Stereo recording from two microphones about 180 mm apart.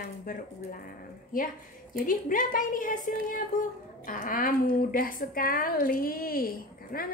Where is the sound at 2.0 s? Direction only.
50° left (ahead or behind).